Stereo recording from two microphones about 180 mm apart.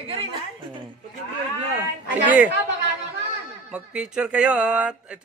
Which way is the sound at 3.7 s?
5° right (ahead or behind).